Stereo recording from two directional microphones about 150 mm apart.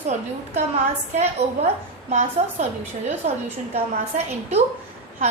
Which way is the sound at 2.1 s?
50° right (ahead or behind).